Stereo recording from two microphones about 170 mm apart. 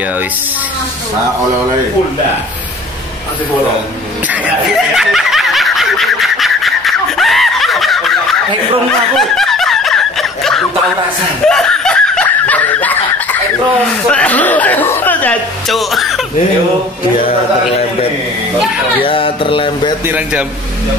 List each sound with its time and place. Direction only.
4.3 s snicker: 5° right (ahead or behind)
14.1 s speech: 10° left (ahead or behind)
19.0 s a sound: 30° left (ahead or behind)
20.1 s a man's voice: 10° right (ahead or behind)